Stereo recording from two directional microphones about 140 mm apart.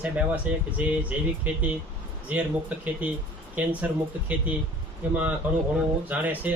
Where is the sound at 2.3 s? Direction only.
10° right (ahead or behind).